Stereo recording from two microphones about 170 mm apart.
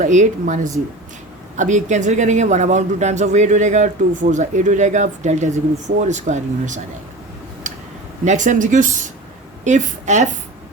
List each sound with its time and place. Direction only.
0.0 s a man's voice: 45° right (ahead or behind)
7.6 s a sound: 50° right (ahead or behind)
8.2 s a man's voice: 45° right (ahead or behind)